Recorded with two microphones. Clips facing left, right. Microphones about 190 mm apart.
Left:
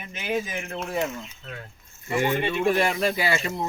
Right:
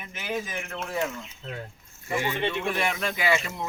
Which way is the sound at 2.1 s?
50° left (ahead or behind).